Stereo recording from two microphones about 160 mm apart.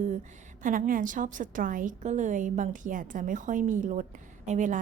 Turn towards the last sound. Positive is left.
turn(degrees=-50)  # may be behind; listen again after turning